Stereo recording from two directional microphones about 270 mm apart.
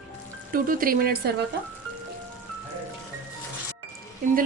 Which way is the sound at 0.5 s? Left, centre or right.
Right.